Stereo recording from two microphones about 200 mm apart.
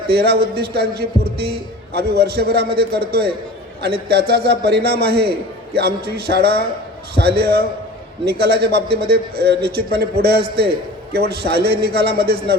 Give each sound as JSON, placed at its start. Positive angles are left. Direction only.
{"t": 0.1, "sound": "a man's voice", "side_deg": -50}